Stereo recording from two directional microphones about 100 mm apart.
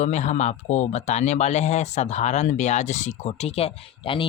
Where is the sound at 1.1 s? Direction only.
90° left.